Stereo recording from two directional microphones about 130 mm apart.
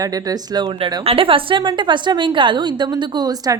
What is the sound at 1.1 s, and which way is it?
A woman's voice, 45° right (ahead or behind).